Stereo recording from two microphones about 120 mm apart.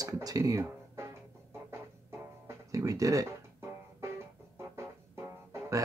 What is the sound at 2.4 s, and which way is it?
Music, 30° right (ahead or behind).